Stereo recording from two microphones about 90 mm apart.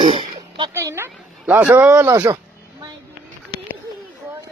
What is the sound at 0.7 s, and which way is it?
A woman's voice, 30° right (ahead or behind).